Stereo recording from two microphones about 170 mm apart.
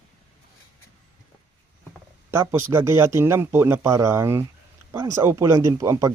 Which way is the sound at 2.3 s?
15° right (ahead or behind).